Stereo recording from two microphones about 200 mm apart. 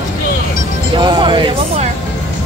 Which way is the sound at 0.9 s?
25° right (ahead or behind).